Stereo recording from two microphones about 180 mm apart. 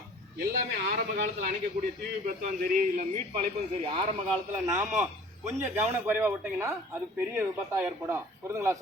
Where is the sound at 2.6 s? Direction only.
50° right (ahead or behind).